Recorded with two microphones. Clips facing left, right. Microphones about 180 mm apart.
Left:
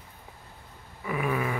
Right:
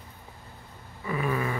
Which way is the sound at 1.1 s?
10° left (ahead or behind).